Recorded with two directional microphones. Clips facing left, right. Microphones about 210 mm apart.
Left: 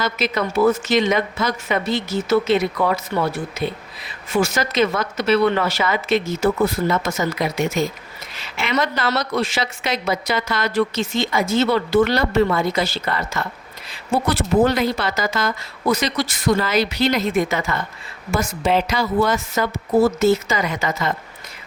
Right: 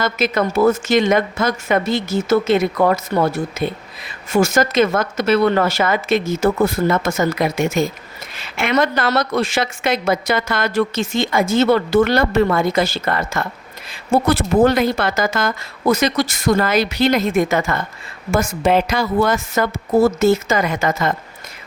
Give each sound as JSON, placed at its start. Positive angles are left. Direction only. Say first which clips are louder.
{"t": 0.0, "sound": "a woman's voice", "louder": "right 4 dB", "side_deg": -50}